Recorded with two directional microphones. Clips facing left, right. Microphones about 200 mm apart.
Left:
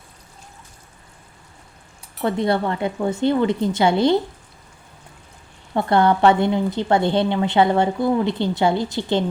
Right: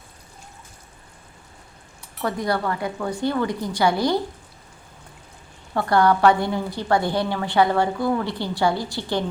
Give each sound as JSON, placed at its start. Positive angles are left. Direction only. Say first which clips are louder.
{"t": 2.2, "sound": "a woman's voice", "louder": "left 4 dB", "side_deg": 25}
{"t": 5.7, "sound": "a woman's voice", "louder": "left 2 dB", "side_deg": 25}